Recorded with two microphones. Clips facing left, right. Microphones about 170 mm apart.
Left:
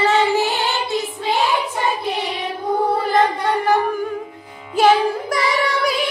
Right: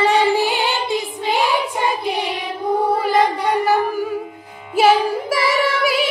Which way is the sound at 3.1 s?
10° right (ahead or behind).